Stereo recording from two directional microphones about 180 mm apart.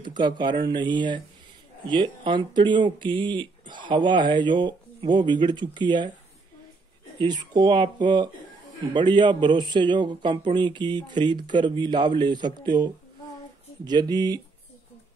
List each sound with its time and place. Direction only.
0.0 s speech: 25° right (ahead or behind)
7.2 s speech: 25° right (ahead or behind)